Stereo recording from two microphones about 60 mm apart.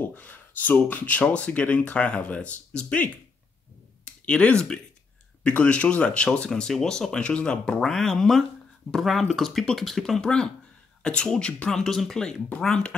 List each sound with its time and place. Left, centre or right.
0.0 s speech: left; by 3.0 s centre
4.3 s speech: centre